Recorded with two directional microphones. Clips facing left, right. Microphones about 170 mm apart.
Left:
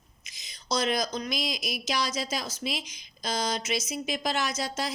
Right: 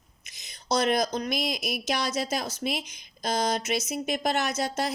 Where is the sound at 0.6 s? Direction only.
60° right (ahead or behind).